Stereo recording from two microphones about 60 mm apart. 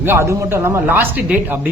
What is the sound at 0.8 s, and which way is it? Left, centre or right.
Speech, right.